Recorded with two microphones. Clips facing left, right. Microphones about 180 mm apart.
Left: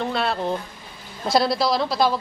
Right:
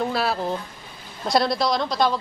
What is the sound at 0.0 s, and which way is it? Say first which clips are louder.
A man's voice: even; 5° right (ahead or behind).